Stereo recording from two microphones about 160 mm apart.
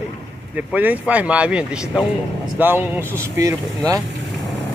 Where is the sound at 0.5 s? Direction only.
10° right (ahead or behind).